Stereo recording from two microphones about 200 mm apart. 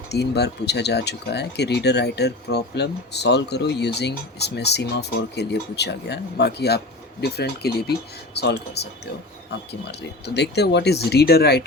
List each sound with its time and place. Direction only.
0.1 s speech: 55° left (ahead or behind)
10.2 s speech: 55° left (ahead or behind)